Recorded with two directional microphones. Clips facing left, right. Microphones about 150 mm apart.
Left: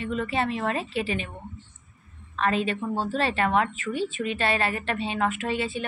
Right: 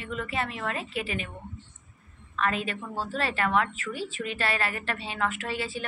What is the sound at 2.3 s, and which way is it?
A woman's voice, 25° left (ahead or behind).